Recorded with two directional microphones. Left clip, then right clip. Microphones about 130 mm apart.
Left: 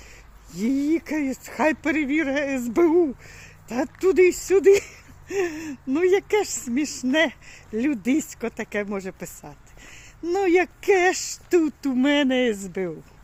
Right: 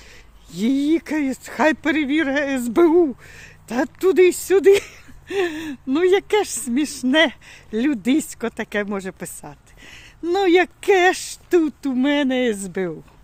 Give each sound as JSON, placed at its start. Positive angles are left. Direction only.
{"t": 0.5, "sound": "speech", "side_deg": -35}
{"t": 11.6, "sound": "speech", "side_deg": -10}